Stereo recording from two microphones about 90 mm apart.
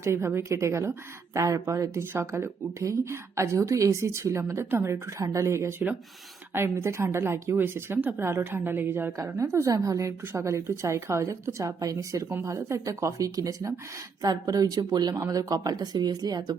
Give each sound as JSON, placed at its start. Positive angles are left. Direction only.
{"t": 0.0, "sound": "a woman's voice", "side_deg": -30}
{"t": 9.1, "sound": "a woman's voice", "side_deg": -35}